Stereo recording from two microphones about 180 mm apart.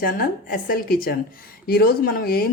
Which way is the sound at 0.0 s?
55° left (ahead or behind).